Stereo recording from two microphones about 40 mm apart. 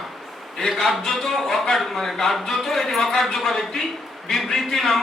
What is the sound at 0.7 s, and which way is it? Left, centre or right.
A man's voice, centre.